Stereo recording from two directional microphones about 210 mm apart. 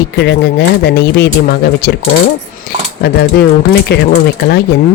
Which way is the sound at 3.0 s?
50° left (ahead or behind).